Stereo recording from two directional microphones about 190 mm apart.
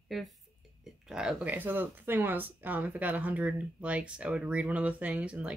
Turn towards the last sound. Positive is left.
turn(degrees=-5)  # may be behind; listen again after turning